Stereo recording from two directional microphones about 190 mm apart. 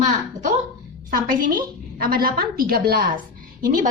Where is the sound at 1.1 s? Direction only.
50° right (ahead or behind).